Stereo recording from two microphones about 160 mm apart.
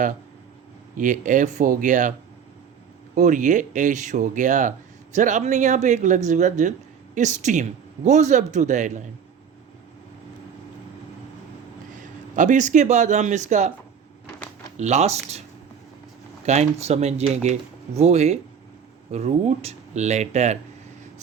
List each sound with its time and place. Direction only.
0.9 s speech: 55° right (ahead or behind)
3.2 s speech: 50° right (ahead or behind)
12.4 s speech: 50° right (ahead or behind)
14.8 s speech: 45° right (ahead or behind)
16.5 s speech: 45° right (ahead or behind)